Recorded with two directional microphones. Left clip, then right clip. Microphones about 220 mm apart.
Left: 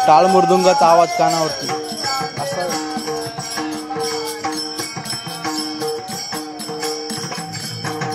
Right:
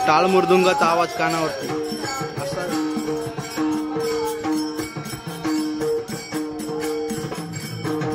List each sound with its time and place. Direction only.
0.0 s music: 15° left (ahead or behind)